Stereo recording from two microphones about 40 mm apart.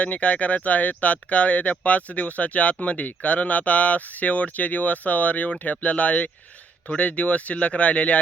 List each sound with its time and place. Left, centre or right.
0.0 s speech: left